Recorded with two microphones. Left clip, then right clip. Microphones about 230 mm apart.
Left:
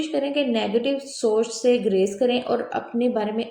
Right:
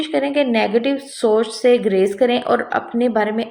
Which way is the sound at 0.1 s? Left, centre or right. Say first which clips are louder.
Right 7 dB; centre.